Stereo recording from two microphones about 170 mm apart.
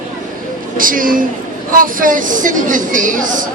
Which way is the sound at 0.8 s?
55° right (ahead or behind).